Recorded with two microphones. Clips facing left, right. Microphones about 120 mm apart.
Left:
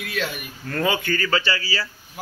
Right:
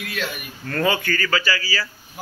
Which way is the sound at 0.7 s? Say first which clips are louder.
Right 1 dB; 15° left (ahead or behind).